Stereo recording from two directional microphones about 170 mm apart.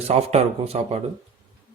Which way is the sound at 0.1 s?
40° right (ahead or behind).